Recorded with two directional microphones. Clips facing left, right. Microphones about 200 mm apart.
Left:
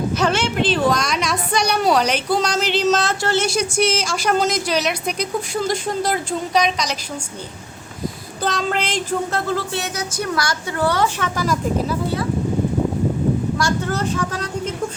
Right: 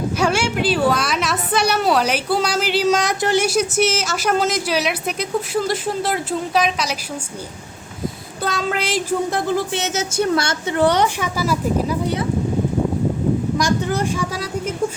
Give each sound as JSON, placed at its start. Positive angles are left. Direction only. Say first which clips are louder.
{"t": 0.2, "sound": "a woman's voice", "louder": "right 2 dB", "side_deg": -10}
{"t": 8.4, "sound": "speech", "louder": "even", "side_deg": 0}
{"t": 11.3, "sound": "speech", "louder": "right 1 dB", "side_deg": -5}
{"t": 13.6, "sound": "speech", "louder": "right 2 dB", "side_deg": -15}